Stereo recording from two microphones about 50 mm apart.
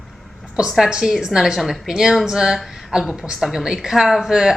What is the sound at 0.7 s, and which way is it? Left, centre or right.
A woman's voice, centre.